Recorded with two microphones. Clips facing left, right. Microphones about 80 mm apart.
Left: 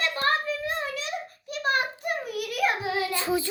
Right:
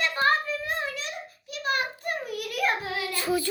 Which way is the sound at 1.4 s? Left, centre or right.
Left.